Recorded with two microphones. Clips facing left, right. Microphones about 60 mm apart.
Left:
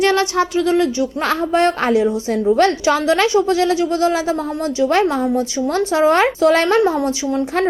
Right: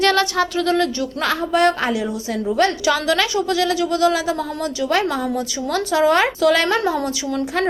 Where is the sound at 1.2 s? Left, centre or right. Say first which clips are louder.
Even; left.